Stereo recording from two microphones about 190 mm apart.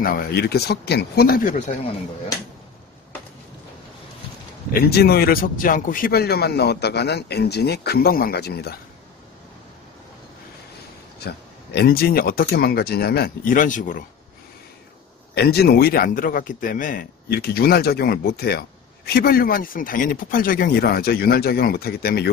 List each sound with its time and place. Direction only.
0.0 s a man's voice: 50° left (ahead or behind)
4.7 s a man's voice: 55° left (ahead or behind)
11.1 s a man's voice: 55° left (ahead or behind)
15.3 s a man's voice: 55° left (ahead or behind)